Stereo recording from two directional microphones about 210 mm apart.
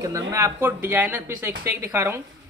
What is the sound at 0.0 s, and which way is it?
Speech, 15° right (ahead or behind).